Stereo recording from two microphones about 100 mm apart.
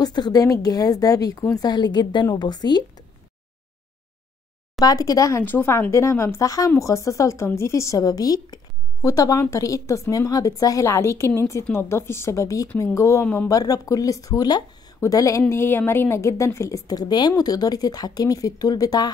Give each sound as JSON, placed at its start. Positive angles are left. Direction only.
{"t": 0.0, "sound": "speech", "side_deg": 45}
{"t": 1.7, "sound": "a woman's voice", "side_deg": 45}
{"t": 4.7, "sound": "speech", "side_deg": 35}
{"t": 5.4, "sound": "a woman's voice", "side_deg": 20}
{"t": 13.5, "sound": "a woman's voice", "side_deg": 35}